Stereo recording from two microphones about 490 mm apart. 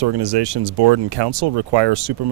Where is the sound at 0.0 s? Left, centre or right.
Right.